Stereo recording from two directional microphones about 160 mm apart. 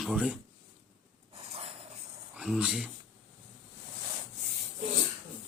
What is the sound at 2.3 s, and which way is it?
Speech, 5° right (ahead or behind).